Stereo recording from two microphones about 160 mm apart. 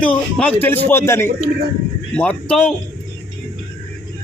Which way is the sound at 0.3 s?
10° left (ahead or behind).